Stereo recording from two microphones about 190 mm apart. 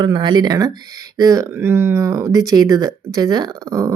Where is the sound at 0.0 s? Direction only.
25° right (ahead or behind).